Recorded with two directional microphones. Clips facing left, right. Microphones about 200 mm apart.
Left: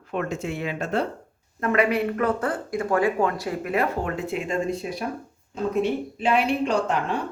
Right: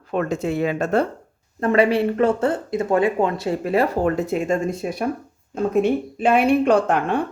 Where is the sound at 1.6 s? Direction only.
30° right (ahead or behind).